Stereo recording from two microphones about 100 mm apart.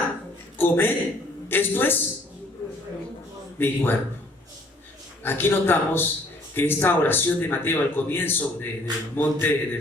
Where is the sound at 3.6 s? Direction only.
20° left (ahead or behind).